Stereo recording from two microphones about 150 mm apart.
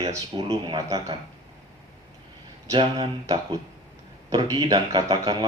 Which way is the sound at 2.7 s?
35° right (ahead or behind).